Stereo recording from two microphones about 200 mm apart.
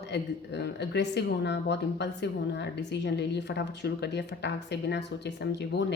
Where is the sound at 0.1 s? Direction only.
60° left (ahead or behind).